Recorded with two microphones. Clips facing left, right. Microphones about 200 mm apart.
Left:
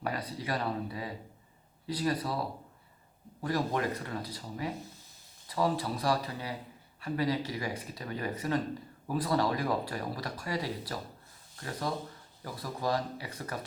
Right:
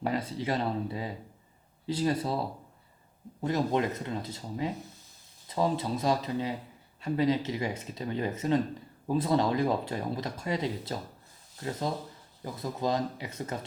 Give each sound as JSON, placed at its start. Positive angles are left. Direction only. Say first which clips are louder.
{"t": 0.0, "sound": "speech", "louder": "right 5 dB", "side_deg": -25}
{"t": 3.4, "sound": "speech", "louder": "right 3 dB", "side_deg": -20}